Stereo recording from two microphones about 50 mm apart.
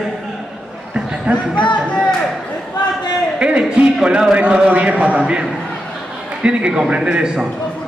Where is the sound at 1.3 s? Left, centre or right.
Right.